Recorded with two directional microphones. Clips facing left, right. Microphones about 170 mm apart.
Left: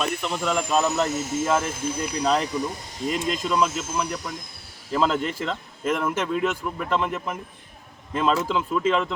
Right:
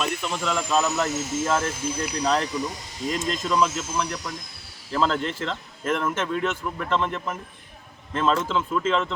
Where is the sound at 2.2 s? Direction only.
5° left (ahead or behind).